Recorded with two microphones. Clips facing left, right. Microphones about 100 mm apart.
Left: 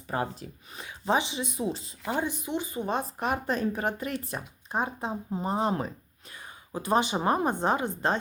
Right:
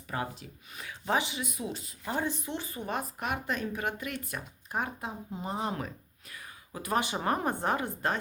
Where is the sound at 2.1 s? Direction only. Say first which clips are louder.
Left 3 dB; 15° left (ahead or behind).